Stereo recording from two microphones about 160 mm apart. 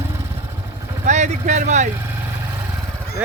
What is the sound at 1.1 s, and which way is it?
Speech, 45° right (ahead or behind).